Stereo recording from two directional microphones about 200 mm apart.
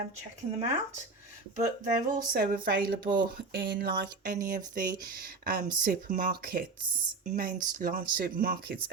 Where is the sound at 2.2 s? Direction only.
50° right (ahead or behind).